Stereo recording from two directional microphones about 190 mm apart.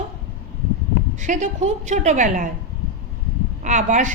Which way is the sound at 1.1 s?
40° right (ahead or behind).